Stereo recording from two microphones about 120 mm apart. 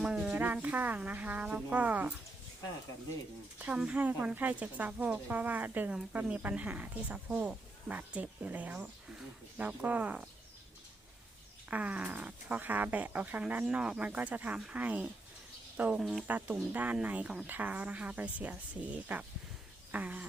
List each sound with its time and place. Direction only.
0.0 s speech: 10° right (ahead or behind)
3.6 s speech: 10° right (ahead or behind)
11.7 s speech: 10° right (ahead or behind)
16.2 s speech: 15° right (ahead or behind)